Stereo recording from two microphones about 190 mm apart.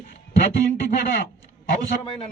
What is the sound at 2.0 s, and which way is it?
Speech, 25° left (ahead or behind).